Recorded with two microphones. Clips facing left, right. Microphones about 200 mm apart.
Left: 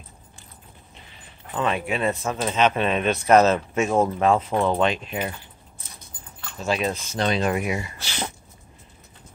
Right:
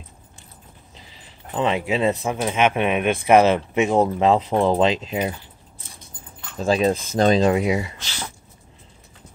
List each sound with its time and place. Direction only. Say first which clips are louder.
1.5 s speech: right 3 dB; 20° right (ahead or behind)
2.4 s speech: right 1 dB; 10° right (ahead or behind)
6.6 s speech: right 6 dB; 35° right (ahead or behind)
7.4 s speech: right 5 dB; 25° right (ahead or behind)